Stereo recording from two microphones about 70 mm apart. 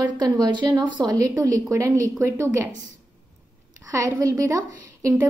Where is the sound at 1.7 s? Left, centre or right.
Right.